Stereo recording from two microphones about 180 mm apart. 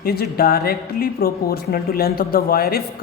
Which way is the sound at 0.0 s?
60° left (ahead or behind).